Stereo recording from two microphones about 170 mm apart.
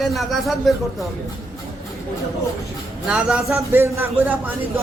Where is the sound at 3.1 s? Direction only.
5° right (ahead or behind).